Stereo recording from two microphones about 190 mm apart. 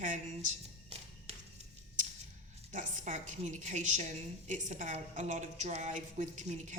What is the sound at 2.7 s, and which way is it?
A woman's voice, 40° right (ahead or behind).